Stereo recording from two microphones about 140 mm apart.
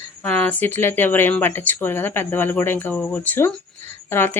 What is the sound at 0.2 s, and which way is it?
Speech, 10° left (ahead or behind).